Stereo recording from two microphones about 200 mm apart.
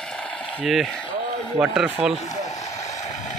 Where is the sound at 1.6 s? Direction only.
5° right (ahead or behind).